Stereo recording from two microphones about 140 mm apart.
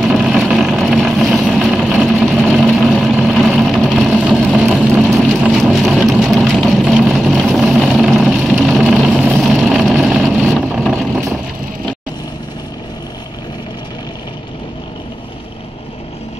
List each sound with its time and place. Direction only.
0.0 s vehicle: centre (ahead or behind)